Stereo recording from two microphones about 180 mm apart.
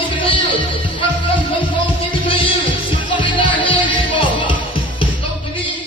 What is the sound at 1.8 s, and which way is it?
Music, 30° left (ahead or behind).